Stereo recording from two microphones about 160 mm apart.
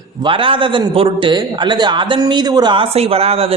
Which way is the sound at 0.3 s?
35° right (ahead or behind).